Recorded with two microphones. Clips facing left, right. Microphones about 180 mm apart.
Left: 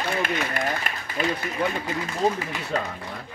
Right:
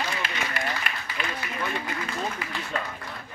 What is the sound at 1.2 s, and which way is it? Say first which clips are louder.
A man's voice: left 8 dB; 40° left (ahead or behind).